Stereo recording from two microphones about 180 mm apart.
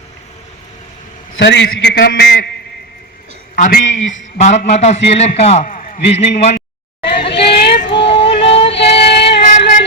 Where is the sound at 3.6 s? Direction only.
50° left (ahead or behind).